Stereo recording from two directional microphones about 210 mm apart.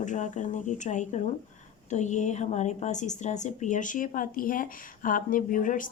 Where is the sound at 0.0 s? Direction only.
35° left (ahead or behind).